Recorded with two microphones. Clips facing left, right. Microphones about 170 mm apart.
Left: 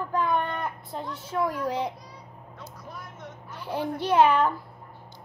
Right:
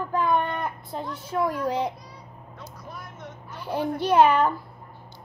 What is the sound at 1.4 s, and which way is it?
Speech, 25° right (ahead or behind).